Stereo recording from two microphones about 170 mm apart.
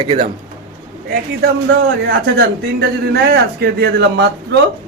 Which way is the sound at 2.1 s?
90° right.